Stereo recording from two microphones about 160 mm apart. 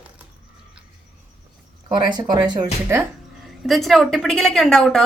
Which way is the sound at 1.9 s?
30° right (ahead or behind).